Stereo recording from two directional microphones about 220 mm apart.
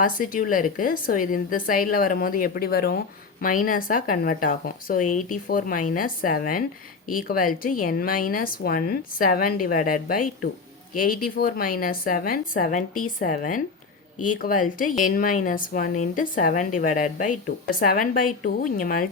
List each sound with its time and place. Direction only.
0.0 s speech: 35° left (ahead or behind)